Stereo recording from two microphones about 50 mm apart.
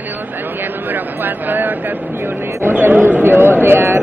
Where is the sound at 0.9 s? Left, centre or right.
Right.